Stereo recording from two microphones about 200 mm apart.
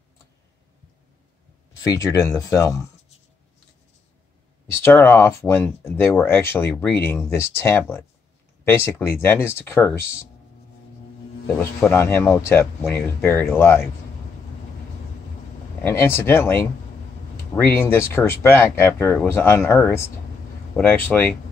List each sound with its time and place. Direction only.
1.8 s speech: 15° left (ahead or behind)
4.8 s speech: 10° left (ahead or behind)
11.4 s speech: 10° left (ahead or behind)
15.8 s speech: 10° left (ahead or behind)